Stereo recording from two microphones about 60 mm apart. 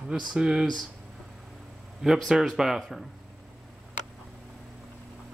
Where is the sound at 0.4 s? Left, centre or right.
Centre.